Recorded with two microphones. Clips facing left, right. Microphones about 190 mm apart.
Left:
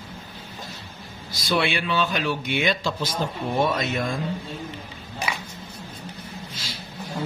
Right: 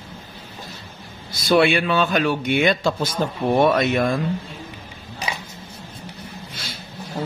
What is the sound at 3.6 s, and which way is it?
Speech, 65° right (ahead or behind).